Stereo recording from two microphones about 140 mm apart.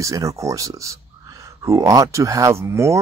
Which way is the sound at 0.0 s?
25° right (ahead or behind).